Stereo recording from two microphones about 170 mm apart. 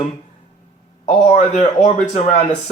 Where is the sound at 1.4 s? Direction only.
40° left (ahead or behind).